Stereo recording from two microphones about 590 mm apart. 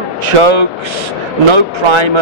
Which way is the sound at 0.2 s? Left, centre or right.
Right.